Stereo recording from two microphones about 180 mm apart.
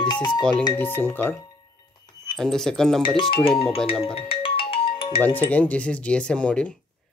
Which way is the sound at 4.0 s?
30° left (ahead or behind).